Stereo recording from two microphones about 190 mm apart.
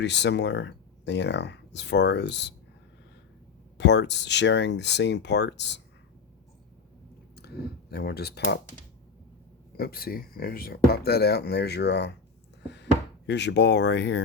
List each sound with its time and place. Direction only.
0.0 s speech: 65° left (ahead or behind)
3.8 s speech: 65° left (ahead or behind)
7.3 s speech: 60° left (ahead or behind)
9.7 s speech: 55° left (ahead or behind)
12.6 s a sound: 65° left (ahead or behind)